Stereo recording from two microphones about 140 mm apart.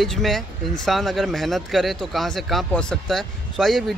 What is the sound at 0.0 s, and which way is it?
Speech, centre (ahead or behind).